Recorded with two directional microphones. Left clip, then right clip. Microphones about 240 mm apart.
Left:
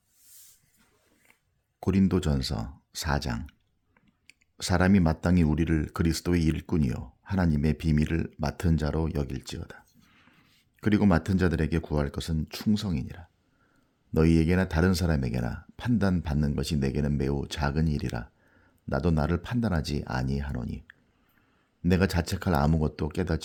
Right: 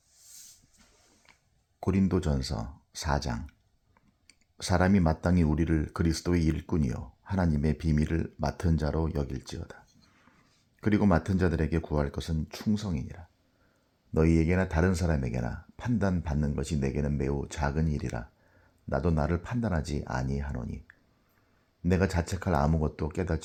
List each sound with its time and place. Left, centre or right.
1.8 s speech: left
14.8 s speech: left
15.2 s speech: left